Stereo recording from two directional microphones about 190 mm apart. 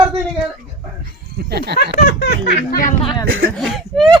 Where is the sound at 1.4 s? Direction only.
60° right (ahead or behind).